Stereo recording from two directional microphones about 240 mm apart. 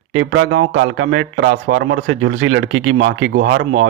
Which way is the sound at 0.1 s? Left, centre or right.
Right.